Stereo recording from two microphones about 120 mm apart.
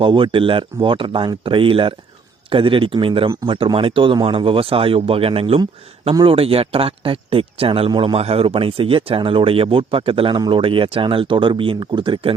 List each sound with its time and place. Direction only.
0.0 s speech: 45° right (ahead or behind)